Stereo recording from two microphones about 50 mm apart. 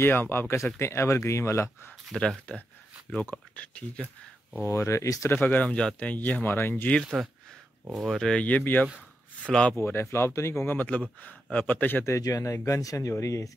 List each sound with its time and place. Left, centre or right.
0.0 s speech: left
2.1 s speech: centre
3.2 s speech: left
4.6 s speech: left
5.3 s speech: left
5.7 s speech: centre
5.9 s speech: left
6.4 s speech: left
7.2 s speech: centre
8.2 s speech: centre
9.8 s speech: left
10.7 s speech: left
12.0 s speech: left